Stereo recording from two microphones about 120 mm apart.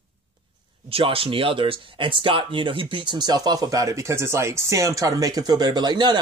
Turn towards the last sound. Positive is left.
turn(degrees=-35)  # may be behind; listen again after turning